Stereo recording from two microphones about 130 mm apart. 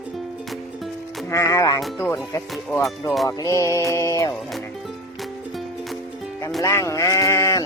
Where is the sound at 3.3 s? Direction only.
25° left (ahead or behind).